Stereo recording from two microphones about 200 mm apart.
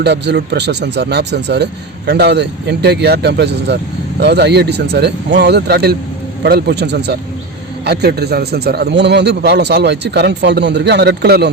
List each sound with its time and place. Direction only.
0.0 s speech: 60° right (ahead or behind)